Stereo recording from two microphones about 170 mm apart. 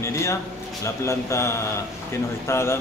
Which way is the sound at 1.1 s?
15° left (ahead or behind).